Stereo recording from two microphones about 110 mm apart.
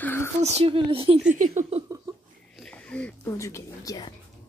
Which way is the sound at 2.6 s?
10° left (ahead or behind).